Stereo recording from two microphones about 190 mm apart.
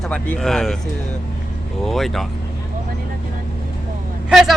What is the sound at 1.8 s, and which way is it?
Speech, centre (ahead or behind).